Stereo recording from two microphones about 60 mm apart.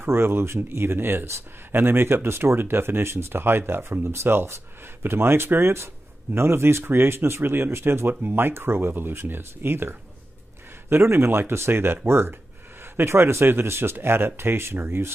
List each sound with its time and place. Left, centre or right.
0.0 s speech: right